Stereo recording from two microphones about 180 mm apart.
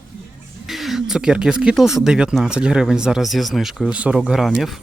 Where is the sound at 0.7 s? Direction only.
Centre (ahead or behind).